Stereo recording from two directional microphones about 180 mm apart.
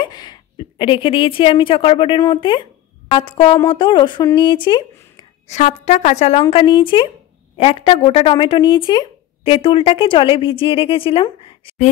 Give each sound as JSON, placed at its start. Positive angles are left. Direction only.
{"t": 0.0, "sound": "a woman's voice", "side_deg": 25}
{"t": 5.5, "sound": "a woman's voice", "side_deg": 40}
{"t": 6.4, "sound": "a woman's voice", "side_deg": 25}